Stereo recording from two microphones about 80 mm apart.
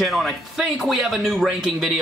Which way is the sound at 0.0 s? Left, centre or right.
Centre.